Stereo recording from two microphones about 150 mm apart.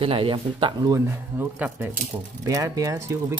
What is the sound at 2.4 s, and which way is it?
Speech, 25° right (ahead or behind).